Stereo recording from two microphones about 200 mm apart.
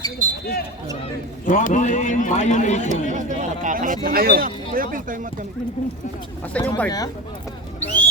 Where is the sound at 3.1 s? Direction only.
40° right (ahead or behind).